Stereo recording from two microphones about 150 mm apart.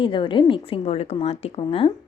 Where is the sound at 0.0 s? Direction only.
35° left (ahead or behind).